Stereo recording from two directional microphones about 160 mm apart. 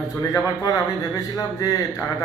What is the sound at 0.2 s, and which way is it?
A man's voice, 20° left (ahead or behind).